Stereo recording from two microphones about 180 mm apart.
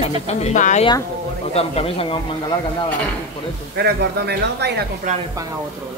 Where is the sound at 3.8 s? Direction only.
65° right (ahead or behind).